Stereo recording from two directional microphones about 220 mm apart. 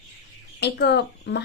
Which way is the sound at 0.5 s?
50° left (ahead or behind).